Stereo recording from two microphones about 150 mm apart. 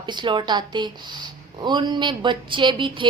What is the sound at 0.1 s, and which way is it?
Speech, 30° right (ahead or behind).